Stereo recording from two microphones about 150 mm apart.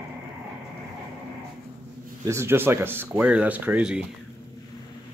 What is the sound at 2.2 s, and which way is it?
Speech, 15° right (ahead or behind).